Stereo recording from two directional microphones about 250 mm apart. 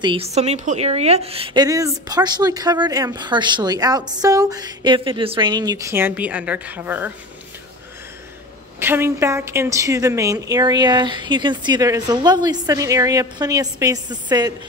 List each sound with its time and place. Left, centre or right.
0.0 s a woman's voice: right
8.7 s a woman's voice: centre